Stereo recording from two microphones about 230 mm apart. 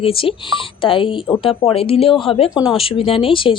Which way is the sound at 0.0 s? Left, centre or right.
Left.